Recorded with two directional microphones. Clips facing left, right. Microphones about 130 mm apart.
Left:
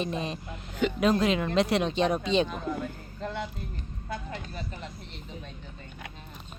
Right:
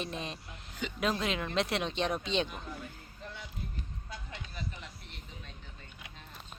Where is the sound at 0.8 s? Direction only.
65° left (ahead or behind).